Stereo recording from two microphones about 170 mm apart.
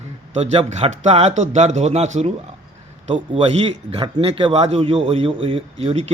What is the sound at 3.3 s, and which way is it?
A man's voice, 35° right (ahead or behind).